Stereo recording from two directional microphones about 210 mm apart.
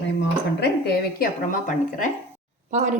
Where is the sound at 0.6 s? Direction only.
50° left (ahead or behind).